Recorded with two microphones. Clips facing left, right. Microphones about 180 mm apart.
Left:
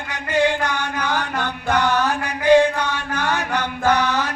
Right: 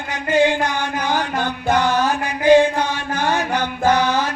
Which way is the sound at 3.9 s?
30° right (ahead or behind).